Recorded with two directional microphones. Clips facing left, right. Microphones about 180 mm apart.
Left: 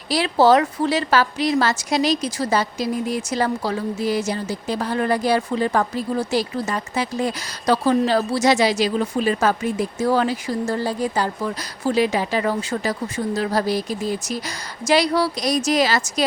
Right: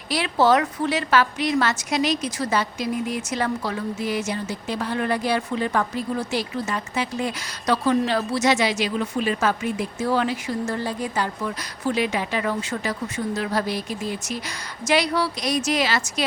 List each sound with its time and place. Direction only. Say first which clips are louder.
0.1 s a woman's voice: left 4 dB; 35° left (ahead or behind)